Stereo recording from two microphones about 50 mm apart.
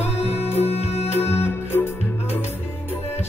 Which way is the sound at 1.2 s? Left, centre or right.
Left.